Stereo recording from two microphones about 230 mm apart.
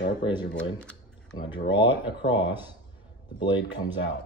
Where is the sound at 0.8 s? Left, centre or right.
Centre.